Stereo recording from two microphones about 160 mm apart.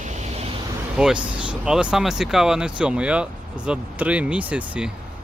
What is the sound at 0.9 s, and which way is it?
Speech, 5° right (ahead or behind).